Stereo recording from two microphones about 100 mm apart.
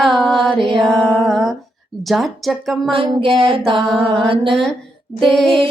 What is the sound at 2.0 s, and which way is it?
Speech, centre (ahead or behind).